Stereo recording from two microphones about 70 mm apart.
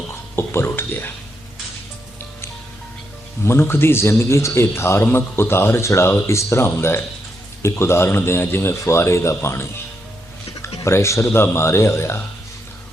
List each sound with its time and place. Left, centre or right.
0.3 s a man's voice: left
3.4 s a man's voice: left